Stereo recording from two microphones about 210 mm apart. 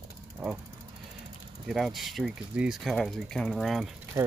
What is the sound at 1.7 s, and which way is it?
Speech, centre (ahead or behind).